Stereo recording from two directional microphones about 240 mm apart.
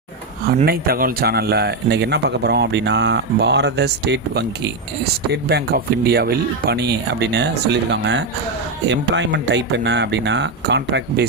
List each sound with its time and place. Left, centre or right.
0.4 s speech: right